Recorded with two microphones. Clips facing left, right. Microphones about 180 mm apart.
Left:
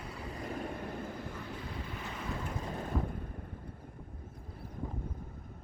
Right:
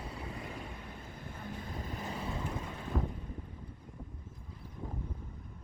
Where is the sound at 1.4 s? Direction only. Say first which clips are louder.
Even; 45° right (ahead or behind).